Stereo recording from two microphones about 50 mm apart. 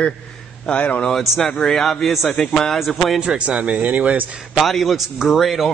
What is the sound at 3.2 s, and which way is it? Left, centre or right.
Speech, centre.